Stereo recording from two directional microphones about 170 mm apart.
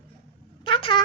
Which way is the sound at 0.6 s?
30° left (ahead or behind).